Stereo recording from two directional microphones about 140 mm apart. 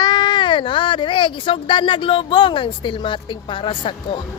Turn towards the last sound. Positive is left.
turn(degrees=40)  # may be behind; listen again after turning